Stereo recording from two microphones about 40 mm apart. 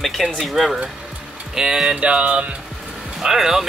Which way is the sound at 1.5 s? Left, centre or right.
Centre.